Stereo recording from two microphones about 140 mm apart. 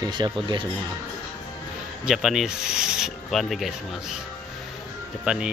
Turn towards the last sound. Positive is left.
turn(degrees=-5)  # may be behind; listen again after turning